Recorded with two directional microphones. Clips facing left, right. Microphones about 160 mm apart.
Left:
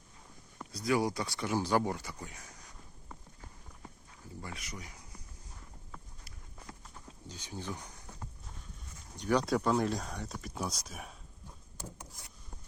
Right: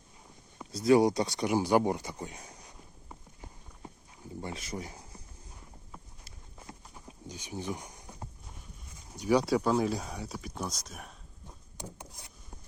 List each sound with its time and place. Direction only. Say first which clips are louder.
0.7 s a sound: right 8 dB; 25° right (ahead or behind)
4.4 s speech: right 7 dB; 25° right (ahead or behind)
5.9 s walk: right 1 dB; 20° right (ahead or behind)
9.1 s speech: right 3 dB; 10° right (ahead or behind)
11.8 s wood: right 3 dB; 20° right (ahead or behind)